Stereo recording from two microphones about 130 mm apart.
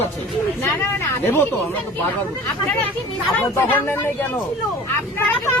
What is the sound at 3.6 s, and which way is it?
Speech, 15° left (ahead or behind).